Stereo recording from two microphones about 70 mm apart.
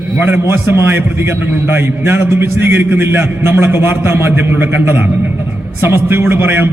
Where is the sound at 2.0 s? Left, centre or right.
Right.